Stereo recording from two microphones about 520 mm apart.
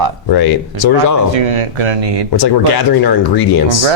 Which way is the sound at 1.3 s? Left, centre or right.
Right.